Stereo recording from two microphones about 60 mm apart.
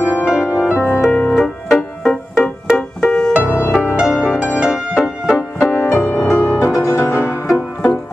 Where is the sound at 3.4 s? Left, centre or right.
Left.